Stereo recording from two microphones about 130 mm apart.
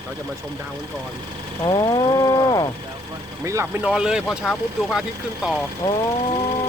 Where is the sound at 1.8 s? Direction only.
30° left (ahead or behind).